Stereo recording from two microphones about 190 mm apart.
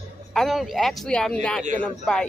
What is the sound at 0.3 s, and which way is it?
Speech, centre (ahead or behind).